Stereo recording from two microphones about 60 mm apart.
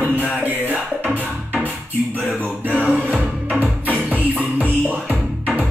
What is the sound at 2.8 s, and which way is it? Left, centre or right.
Music, right.